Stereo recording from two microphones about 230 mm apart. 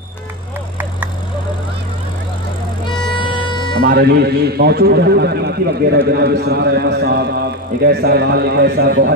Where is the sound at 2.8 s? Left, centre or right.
Left.